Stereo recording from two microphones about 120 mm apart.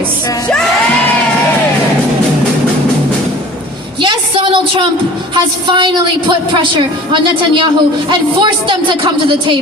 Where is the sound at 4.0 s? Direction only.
40° right (ahead or behind).